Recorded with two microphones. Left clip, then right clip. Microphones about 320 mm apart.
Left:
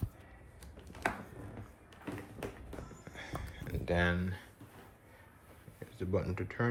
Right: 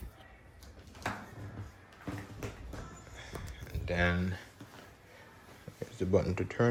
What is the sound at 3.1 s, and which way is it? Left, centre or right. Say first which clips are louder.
Horse: left 3 dB; left.